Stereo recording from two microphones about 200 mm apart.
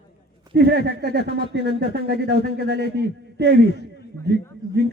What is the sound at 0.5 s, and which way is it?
A man's voice, 55° right (ahead or behind).